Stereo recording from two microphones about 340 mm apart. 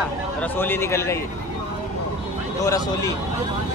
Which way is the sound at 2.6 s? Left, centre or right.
Centre.